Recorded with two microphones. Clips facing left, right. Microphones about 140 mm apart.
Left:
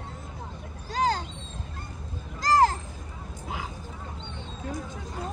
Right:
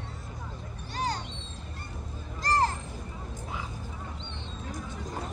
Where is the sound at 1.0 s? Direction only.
90° left.